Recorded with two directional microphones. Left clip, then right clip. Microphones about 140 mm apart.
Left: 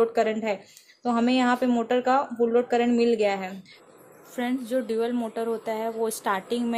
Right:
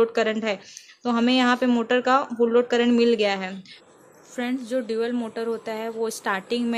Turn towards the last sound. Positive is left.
turn(degrees=-10)  # may be behind; listen again after turning